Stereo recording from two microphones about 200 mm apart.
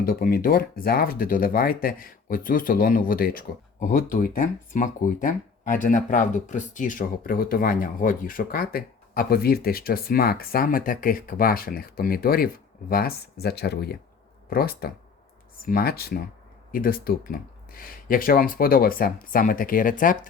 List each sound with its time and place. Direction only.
0.0 s speech: 45° left (ahead or behind)